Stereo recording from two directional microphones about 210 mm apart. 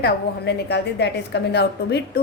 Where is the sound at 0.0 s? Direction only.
55° left (ahead or behind).